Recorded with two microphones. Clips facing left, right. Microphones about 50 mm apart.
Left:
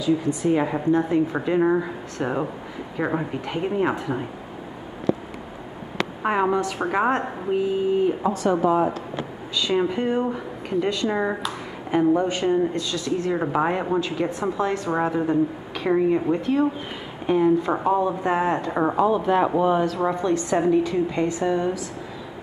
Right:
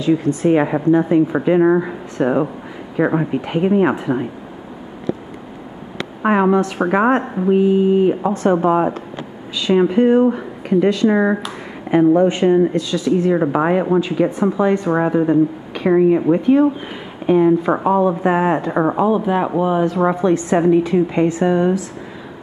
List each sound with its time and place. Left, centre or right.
0.0 s a woman's voice: right
0.7 s speech: right
6.2 s speech: right
8.3 s speech: right
9.6 s speech: right
20.2 s speech: right